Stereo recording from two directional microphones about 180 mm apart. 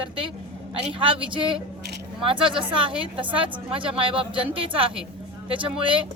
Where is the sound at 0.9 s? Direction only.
30° right (ahead or behind).